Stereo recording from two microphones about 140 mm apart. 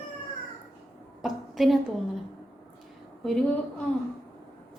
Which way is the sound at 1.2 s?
Centre (ahead or behind).